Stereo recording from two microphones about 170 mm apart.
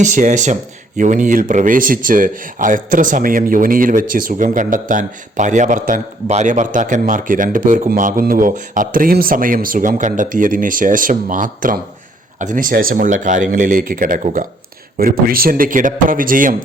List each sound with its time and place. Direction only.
0.0 s speech: 50° right (ahead or behind)
14.9 s speech: 60° right (ahead or behind)